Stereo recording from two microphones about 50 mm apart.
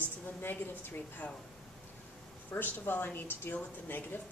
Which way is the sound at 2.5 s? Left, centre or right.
Left.